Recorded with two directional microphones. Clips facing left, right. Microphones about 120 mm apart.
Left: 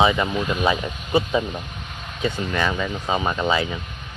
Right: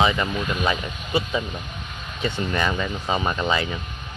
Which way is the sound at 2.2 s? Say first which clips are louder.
Left 1 dB; 5° left (ahead or behind).